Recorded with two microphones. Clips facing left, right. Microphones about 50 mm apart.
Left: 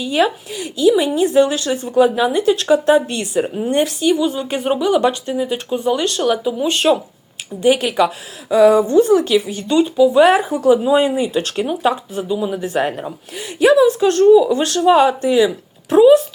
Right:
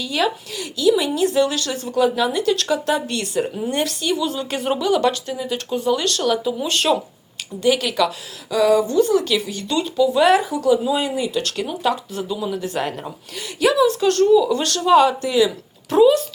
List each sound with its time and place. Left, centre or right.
0.0 s a woman's voice: left
7.6 s a woman's voice: left